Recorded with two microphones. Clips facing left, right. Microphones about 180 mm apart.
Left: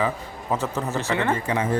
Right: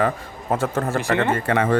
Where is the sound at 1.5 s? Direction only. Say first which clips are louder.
Right 4 dB; 65° right (ahead or behind).